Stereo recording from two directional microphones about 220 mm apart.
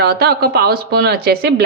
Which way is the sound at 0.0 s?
45° right (ahead or behind).